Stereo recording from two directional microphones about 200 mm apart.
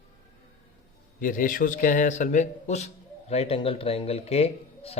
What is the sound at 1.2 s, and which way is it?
A man's voice, 40° left (ahead or behind).